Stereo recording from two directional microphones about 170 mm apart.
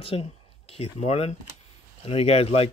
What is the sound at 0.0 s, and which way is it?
Speech, 35° left (ahead or behind).